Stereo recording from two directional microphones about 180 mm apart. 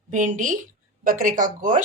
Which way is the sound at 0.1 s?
45° right (ahead or behind).